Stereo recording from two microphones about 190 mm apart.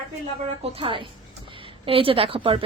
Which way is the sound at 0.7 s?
25° right (ahead or behind).